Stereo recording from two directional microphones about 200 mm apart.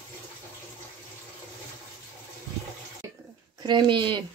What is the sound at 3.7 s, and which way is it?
Speech, 25° right (ahead or behind).